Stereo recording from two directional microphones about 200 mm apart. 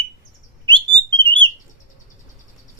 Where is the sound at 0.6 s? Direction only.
20° right (ahead or behind).